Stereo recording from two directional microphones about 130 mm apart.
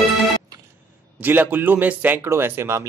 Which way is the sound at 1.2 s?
15° right (ahead or behind).